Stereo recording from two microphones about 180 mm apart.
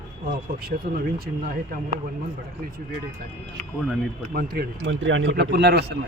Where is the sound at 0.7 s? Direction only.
50° right (ahead or behind).